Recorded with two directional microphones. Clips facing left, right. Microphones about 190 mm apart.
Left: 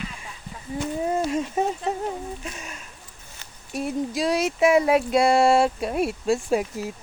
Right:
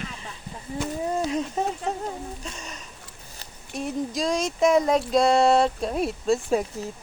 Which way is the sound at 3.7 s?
5° left (ahead or behind).